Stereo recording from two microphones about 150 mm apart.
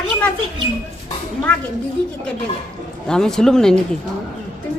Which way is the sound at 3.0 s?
5° left (ahead or behind).